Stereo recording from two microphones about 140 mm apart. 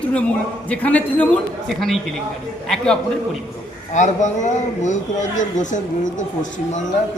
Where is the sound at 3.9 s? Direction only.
60° left (ahead or behind).